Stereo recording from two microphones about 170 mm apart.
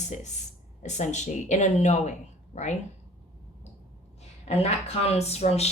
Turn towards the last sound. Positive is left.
turn(degrees=40)  # may be behind; listen again after turning